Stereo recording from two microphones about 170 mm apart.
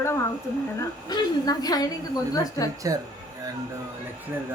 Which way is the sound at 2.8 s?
20° right (ahead or behind).